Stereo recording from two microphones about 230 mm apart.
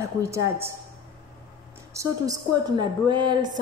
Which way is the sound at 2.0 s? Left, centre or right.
Centre.